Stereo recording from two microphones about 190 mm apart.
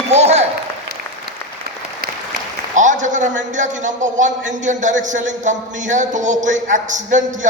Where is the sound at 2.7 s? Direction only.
40° right (ahead or behind).